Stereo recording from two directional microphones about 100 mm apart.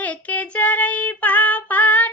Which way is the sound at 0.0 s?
15° left (ahead or behind).